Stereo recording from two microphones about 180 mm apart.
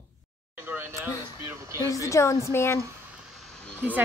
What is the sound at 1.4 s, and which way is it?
Speech, 15° right (ahead or behind).